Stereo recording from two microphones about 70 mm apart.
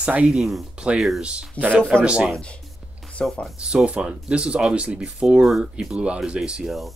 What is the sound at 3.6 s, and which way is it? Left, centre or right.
Speech, centre.